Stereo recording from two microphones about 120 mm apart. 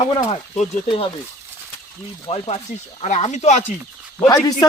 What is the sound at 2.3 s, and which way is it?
Speech, 60° left (ahead or behind).